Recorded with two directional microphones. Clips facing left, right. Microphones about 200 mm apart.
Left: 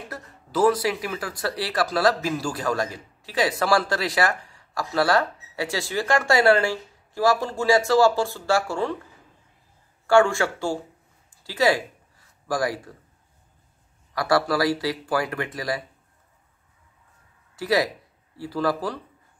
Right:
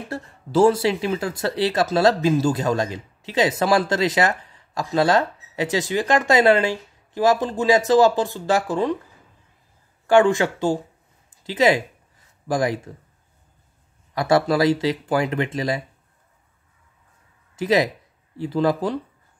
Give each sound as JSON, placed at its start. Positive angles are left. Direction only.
{"t": 0.1, "sound": "speech", "side_deg": -25}
{"t": 10.0, "sound": "speech", "side_deg": -20}
{"t": 14.1, "sound": "speech", "side_deg": -20}
{"t": 17.6, "sound": "speech", "side_deg": -20}